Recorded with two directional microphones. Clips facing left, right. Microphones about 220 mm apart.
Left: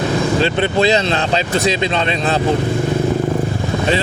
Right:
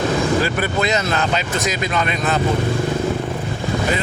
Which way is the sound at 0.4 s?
25° left (ahead or behind).